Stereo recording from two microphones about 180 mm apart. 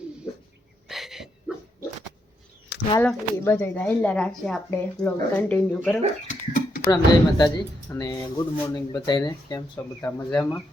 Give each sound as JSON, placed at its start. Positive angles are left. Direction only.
{"t": 0.9, "sound": "a sound", "side_deg": 0}
{"t": 3.0, "sound": "speech", "side_deg": 10}
{"t": 6.2, "sound": "dog", "side_deg": 45}
{"t": 6.9, "sound": "speech", "side_deg": 20}
{"t": 10.0, "sound": "speech", "side_deg": 10}